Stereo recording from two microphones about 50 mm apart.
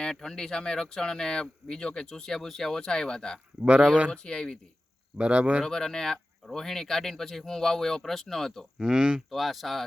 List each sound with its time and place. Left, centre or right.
0.0 s speech: centre
5.1 s speech: right
5.6 s speech: centre
8.8 s speech: centre
9.3 s speech: centre